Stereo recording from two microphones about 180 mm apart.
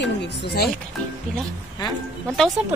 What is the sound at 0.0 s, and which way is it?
Speech, 70° left (ahead or behind).